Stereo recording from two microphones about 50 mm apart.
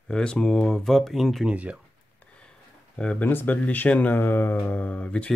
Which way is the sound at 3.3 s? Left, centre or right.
Left.